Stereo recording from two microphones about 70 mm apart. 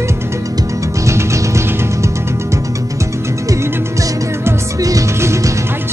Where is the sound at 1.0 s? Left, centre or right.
Right.